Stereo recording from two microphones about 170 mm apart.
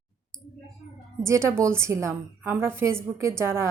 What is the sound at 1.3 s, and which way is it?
A woman's voice, 15° right (ahead or behind).